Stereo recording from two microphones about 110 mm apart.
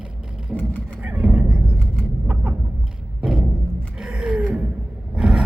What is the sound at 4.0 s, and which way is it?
Gasp, 5° right (ahead or behind).